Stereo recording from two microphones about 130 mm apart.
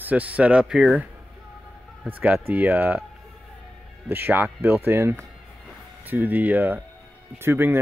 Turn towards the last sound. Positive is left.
turn(degrees=-15)  # may be behind; listen again after turning